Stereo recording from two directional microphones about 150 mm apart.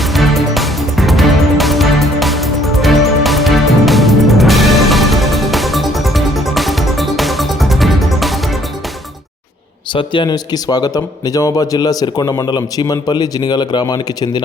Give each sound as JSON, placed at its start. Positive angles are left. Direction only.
{"t": 0.0, "sound": "music", "side_deg": 0}
{"t": 9.9, "sound": "speech", "side_deg": 30}